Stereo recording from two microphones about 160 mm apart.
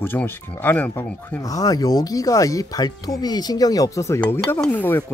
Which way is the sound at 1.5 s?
25° left (ahead or behind).